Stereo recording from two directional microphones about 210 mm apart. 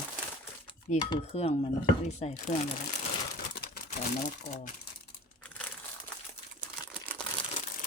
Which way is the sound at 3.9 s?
35° left (ahead or behind).